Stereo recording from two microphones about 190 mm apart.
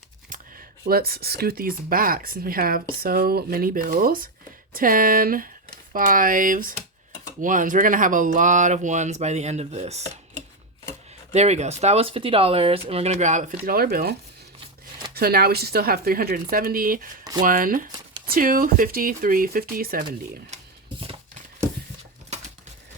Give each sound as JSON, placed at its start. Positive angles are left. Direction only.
{"t": 0.3, "sound": "speech", "side_deg": -50}
{"t": 11.3, "sound": "speech", "side_deg": -35}
{"t": 20.5, "sound": "a sound", "side_deg": -35}